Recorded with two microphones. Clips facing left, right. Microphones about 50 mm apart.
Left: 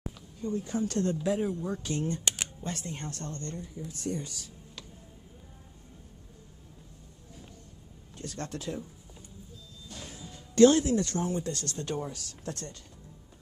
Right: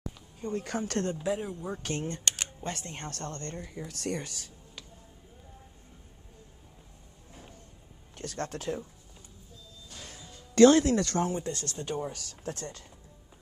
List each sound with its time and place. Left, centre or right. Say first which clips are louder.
0.5 s speech: left 1 dB; right
1.2 s speech: left 3 dB; centre
1.8 s speech: left 1 dB; right
2.2 s a sound: even; centre
2.6 s speech: left 1 dB; right
3.1 s speech: even; right
3.6 s speech: even; right
8.2 s speech: right 2 dB; right
10.5 s speech: right 1 dB; right
11.2 s speech: even; right
12.4 s speech: right 1 dB; right